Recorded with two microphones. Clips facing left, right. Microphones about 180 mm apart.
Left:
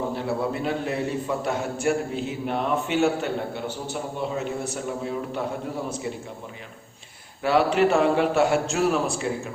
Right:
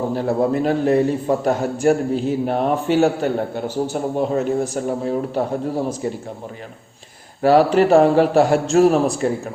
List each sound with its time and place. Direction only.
0.2 s a man's voice: 40° right (ahead or behind)
7.4 s a man's voice: 40° right (ahead or behind)